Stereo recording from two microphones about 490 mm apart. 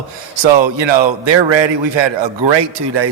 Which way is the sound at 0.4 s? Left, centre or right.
Right.